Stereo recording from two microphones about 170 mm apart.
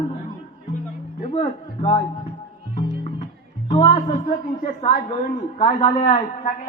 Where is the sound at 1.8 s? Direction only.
25° left (ahead or behind).